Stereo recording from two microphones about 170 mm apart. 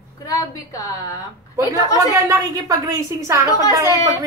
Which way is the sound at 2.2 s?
20° right (ahead or behind).